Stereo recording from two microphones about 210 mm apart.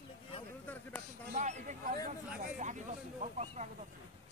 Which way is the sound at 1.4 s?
35° right (ahead or behind).